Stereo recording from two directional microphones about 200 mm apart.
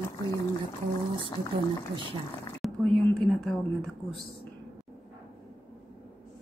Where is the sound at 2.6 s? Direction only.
Centre (ahead or behind).